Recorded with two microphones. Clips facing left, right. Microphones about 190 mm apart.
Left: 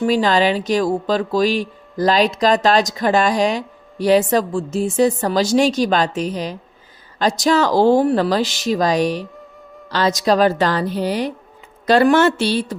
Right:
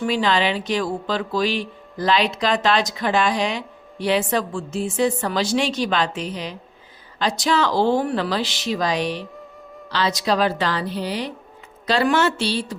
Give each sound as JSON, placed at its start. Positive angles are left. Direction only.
{"t": 0.0, "sound": "speech", "side_deg": 40}